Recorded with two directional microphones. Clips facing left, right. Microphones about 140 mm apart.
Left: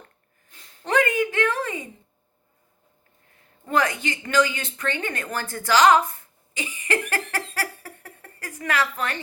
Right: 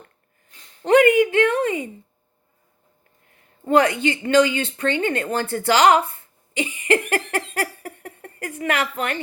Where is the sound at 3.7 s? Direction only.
30° right (ahead or behind).